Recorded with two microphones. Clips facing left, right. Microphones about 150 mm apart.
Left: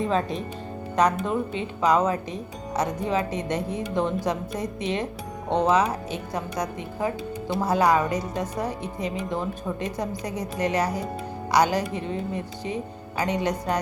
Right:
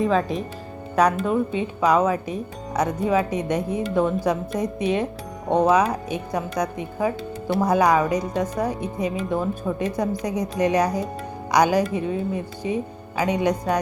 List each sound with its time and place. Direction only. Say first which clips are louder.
0.0 s speech: right 4 dB; centre (ahead or behind)
1.2 s speech: right 4 dB; 15° right (ahead or behind)